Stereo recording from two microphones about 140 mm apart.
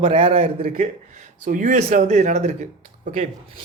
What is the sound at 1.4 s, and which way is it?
Speech, 65° right (ahead or behind).